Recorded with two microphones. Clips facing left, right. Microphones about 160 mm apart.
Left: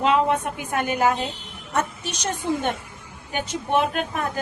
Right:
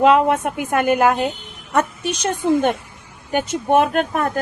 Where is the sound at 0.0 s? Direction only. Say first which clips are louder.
Right 6 dB; 60° right (ahead or behind).